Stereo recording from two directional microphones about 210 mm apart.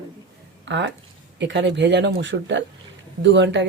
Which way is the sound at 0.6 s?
60° right (ahead or behind).